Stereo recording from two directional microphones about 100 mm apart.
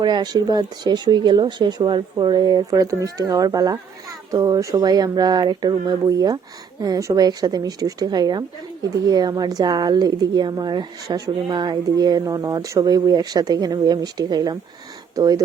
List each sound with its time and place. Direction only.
0.0 s a woman's voice: 45° right (ahead or behind)